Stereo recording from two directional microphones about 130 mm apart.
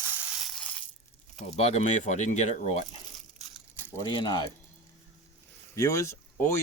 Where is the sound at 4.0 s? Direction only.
30° left (ahead or behind).